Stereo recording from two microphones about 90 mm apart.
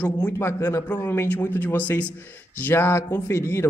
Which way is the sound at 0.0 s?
25° left (ahead or behind).